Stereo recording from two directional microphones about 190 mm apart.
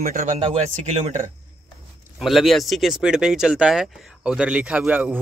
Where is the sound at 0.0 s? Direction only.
45° right (ahead or behind).